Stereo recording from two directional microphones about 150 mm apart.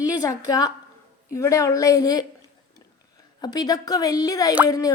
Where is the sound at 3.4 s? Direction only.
25° left (ahead or behind).